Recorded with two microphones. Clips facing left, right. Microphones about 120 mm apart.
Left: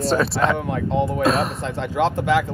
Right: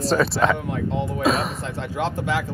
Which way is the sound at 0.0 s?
Centre (ahead or behind).